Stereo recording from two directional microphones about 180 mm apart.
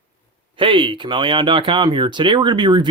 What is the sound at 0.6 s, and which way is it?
Speech, 25° right (ahead or behind).